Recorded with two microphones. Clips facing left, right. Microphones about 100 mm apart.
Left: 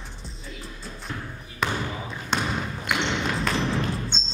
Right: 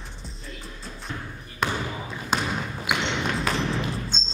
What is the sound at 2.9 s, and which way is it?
Basketball bounce, centre (ahead or behind).